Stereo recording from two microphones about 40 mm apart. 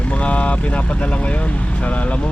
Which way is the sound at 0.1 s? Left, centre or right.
Left.